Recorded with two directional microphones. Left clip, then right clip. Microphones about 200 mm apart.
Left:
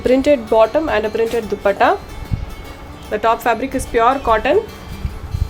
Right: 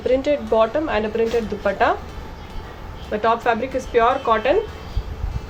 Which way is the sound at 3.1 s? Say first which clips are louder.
Left 3 dB; 55° left (ahead or behind).